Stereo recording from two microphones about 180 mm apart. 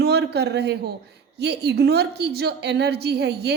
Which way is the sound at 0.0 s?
65° right (ahead or behind).